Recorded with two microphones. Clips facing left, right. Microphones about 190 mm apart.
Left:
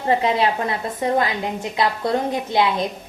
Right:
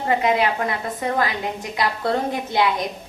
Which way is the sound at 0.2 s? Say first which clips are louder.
Even; 30° left (ahead or behind).